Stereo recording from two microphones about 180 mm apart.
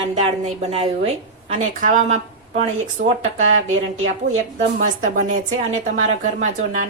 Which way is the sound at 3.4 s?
90° right.